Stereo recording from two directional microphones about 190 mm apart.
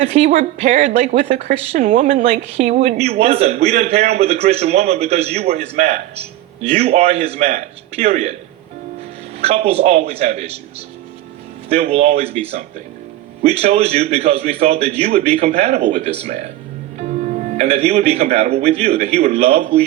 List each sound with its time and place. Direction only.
0.0 s a woman's voice: 35° right (ahead or behind)
9.4 s a woman's voice: 35° right (ahead or behind)
17.6 s a woman's voice: 35° right (ahead or behind)